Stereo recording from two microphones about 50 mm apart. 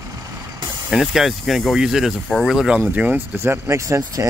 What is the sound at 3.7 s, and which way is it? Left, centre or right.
Speech, right.